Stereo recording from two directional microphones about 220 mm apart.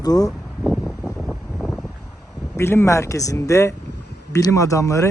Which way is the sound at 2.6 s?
10° left (ahead or behind).